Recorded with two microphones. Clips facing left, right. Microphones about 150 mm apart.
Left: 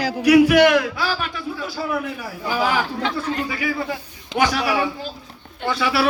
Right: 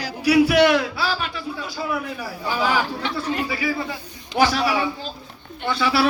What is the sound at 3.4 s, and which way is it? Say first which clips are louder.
A man's voice: left 1 dB; 35° right (ahead or behind).